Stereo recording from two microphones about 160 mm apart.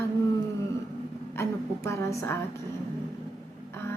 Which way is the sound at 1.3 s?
15° left (ahead or behind).